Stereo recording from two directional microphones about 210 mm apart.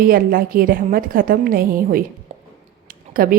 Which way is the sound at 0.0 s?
40° right (ahead or behind).